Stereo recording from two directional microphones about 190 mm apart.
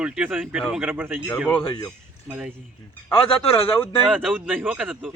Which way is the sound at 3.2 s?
30° left (ahead or behind).